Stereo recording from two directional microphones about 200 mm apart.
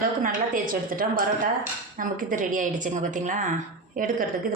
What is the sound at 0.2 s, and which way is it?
A woman's voice, 45° right (ahead or behind).